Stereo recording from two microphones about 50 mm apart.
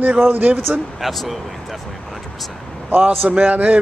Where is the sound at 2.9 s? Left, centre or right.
Right.